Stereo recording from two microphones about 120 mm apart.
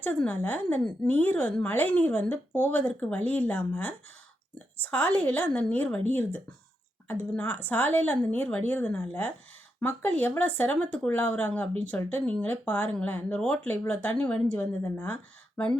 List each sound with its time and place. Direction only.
0.0 s speech: 15° left (ahead or behind)